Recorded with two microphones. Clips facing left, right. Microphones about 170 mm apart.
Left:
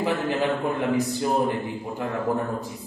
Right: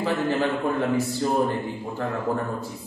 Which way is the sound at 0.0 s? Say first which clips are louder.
Even; 15° left (ahead or behind).